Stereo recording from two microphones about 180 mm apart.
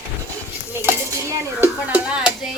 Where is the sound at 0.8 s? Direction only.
10° right (ahead or behind).